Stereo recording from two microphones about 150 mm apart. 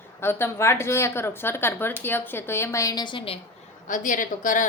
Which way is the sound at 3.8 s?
60° left (ahead or behind).